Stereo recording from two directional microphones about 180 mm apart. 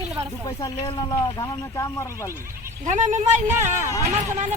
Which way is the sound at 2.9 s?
40° right (ahead or behind).